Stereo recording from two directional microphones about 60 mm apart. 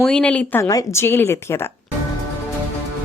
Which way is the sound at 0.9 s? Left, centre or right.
Left.